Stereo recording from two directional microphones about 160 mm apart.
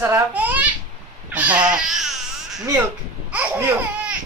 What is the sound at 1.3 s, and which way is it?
Baby cry, 10° right (ahead or behind).